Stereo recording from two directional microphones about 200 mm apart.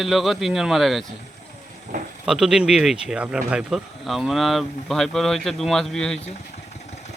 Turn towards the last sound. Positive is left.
turn(degrees=0)  # may be behind; listen again after turning